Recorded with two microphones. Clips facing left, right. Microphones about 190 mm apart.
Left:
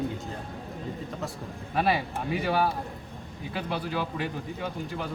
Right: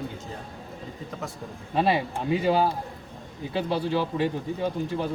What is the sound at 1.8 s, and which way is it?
Speech, 25° right (ahead or behind).